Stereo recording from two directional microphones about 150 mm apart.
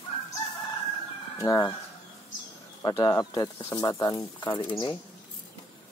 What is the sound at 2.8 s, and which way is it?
Speech, 25° left (ahead or behind).